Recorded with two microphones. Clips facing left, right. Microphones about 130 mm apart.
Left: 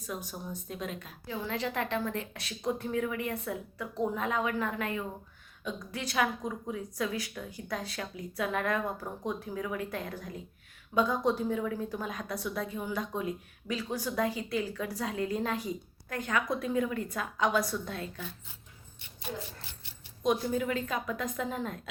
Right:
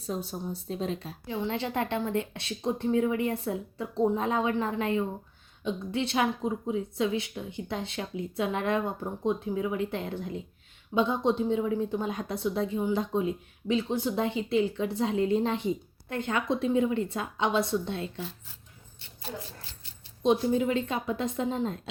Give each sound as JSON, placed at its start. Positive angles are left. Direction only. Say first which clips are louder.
{"t": 0.0, "sound": "a woman's voice", "louder": "right 5 dB", "side_deg": -30}
{"t": 20.2, "sound": "a woman's voice", "louder": "right 5 dB", "side_deg": -25}